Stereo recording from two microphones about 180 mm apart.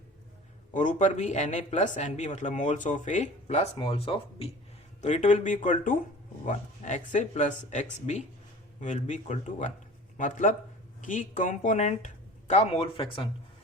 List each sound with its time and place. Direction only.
0.7 s speech: 45° left (ahead or behind)